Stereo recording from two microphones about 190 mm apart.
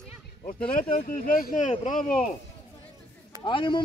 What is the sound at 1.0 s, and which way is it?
Speech, 50° left (ahead or behind).